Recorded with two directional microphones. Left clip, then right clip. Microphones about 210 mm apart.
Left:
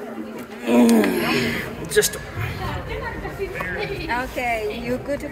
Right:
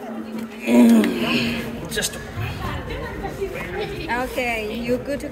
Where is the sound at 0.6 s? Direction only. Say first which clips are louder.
Right 1 dB; 15° right (ahead or behind).